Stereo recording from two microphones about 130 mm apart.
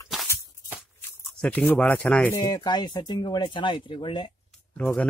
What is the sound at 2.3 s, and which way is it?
Speech, 30° left (ahead or behind).